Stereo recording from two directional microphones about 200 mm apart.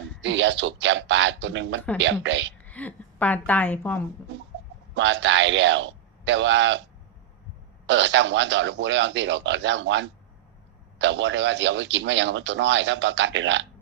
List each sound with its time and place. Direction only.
0.2 s speech: 65° right (ahead or behind)
2.6 s a woman's voice: 5° left (ahead or behind)
4.9 s speech: 65° right (ahead or behind)
7.9 s speech: 65° right (ahead or behind)